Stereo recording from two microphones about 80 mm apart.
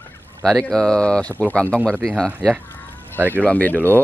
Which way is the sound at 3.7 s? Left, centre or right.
Right.